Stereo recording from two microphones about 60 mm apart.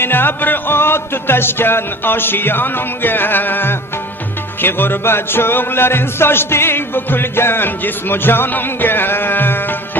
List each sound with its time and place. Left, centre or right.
0.0 s music: left